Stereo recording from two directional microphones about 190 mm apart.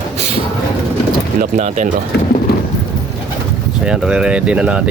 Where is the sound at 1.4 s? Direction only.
40° right (ahead or behind).